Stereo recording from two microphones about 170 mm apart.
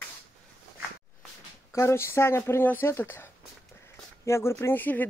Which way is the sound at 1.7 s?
15° left (ahead or behind).